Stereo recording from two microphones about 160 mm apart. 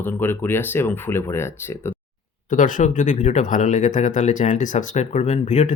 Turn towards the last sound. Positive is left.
turn(degrees=45)  # may be behind; listen again after turning